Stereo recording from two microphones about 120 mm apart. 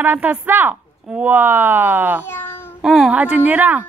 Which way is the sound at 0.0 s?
15° right (ahead or behind).